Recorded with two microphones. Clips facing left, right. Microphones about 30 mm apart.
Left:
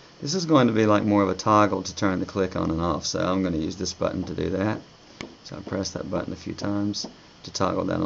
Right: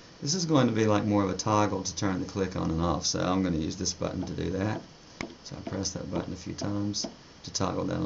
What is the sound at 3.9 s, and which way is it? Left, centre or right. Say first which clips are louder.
Speech: left 6 dB; left.